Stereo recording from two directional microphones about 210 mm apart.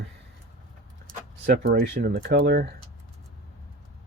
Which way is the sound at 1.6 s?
50° right (ahead or behind).